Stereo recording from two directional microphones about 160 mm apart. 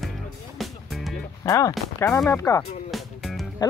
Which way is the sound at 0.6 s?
Centre (ahead or behind).